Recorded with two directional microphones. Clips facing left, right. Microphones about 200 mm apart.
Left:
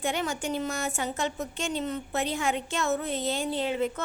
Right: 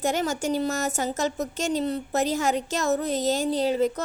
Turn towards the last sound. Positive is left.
turn(degrees=-40)  # may be behind; listen again after turning